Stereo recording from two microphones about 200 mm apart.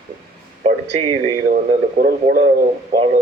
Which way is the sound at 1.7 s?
45° right (ahead or behind).